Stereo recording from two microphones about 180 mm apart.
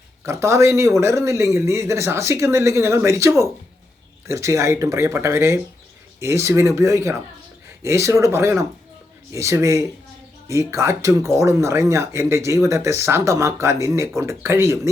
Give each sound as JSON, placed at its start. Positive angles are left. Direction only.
{"t": 0.3, "sound": "speech", "side_deg": -15}